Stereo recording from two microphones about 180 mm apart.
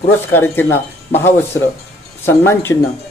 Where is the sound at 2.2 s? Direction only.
15° left (ahead or behind).